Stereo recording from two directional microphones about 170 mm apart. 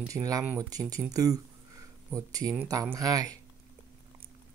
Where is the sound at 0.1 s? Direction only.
20° right (ahead or behind).